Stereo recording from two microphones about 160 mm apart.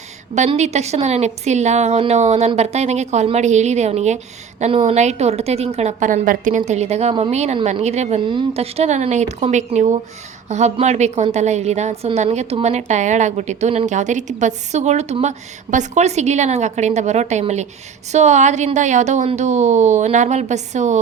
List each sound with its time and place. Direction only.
0.3 s a woman's voice: 45° right (ahead or behind)
6.7 s a woman's voice: 45° right (ahead or behind)